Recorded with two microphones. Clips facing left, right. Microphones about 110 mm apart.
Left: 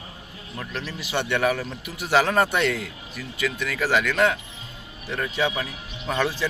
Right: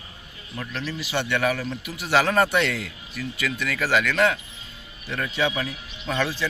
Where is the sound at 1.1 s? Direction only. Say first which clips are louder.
Left 1 dB; 15° left (ahead or behind).